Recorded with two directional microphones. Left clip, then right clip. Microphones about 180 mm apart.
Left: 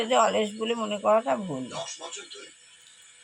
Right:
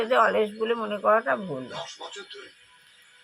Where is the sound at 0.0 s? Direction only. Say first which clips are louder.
Right 1 dB; 10° right (ahead or behind).